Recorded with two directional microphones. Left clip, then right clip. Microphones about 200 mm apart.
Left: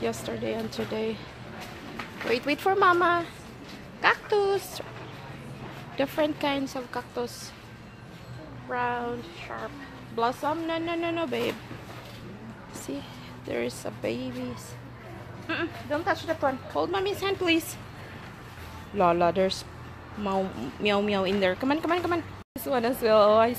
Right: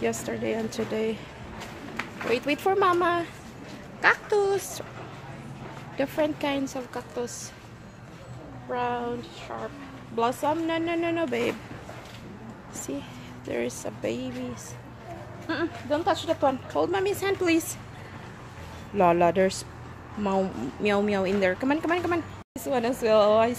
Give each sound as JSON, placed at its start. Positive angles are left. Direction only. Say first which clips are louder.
{"t": 0.0, "sound": "speech", "louder": "right 2 dB", "side_deg": -10}
{"t": 2.3, "sound": "a woman's voice", "louder": "right 1 dB", "side_deg": -5}
{"t": 5.9, "sound": "a woman's voice", "louder": "even", "side_deg": 0}
{"t": 8.6, "sound": "a woman's voice", "louder": "even", "side_deg": -5}
{"t": 10.1, "sound": "speech", "louder": "right 2 dB", "side_deg": -15}
{"t": 13.5, "sound": "a woman's voice", "louder": "right 1 dB", "side_deg": 0}
{"t": 16.3, "sound": "speech", "louder": "right 3 dB", "side_deg": -15}
{"t": 18.9, "sound": "a woman's voice", "louder": "right 2 dB", "side_deg": -15}